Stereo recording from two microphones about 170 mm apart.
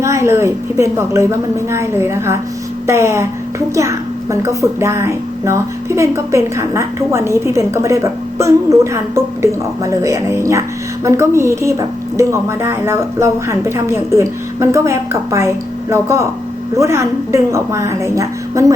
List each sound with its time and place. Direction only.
0.0 s a woman's voice: 15° right (ahead or behind)